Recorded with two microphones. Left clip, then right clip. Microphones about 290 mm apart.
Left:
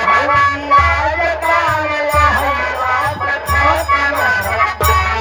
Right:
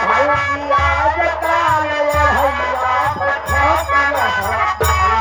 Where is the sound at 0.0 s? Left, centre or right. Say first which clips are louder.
Left 3 dB; centre.